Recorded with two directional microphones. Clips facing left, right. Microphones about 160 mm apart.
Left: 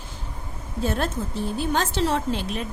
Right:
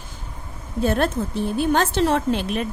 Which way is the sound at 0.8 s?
60° right (ahead or behind).